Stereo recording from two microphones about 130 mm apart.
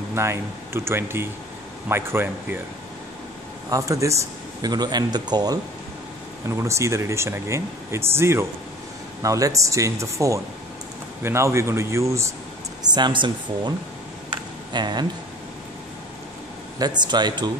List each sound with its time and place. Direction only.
0.1 s speech: 20° right (ahead or behind)
3.7 s a man's voice: 25° right (ahead or behind)
12.8 s a man's voice: 35° right (ahead or behind)
14.3 s a sound: 35° right (ahead or behind)
16.7 s a man's voice: 30° right (ahead or behind)